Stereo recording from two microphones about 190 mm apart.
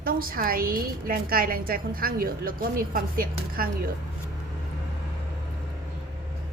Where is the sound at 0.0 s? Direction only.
50° right (ahead or behind).